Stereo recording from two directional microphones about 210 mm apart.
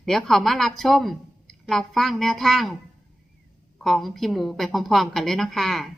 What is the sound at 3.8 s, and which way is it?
A woman's voice, centre (ahead or behind).